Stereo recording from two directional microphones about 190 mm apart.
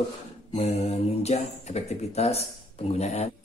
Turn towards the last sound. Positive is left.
turn(degrees=35)  # may be behind; listen again after turning